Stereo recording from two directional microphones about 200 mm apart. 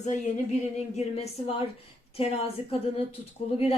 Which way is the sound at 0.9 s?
30° left (ahead or behind).